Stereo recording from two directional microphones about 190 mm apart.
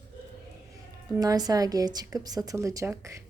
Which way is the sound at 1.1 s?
20° right (ahead or behind).